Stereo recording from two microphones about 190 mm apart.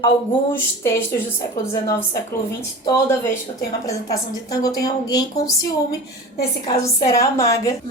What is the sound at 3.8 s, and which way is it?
Speech, 20° left (ahead or behind).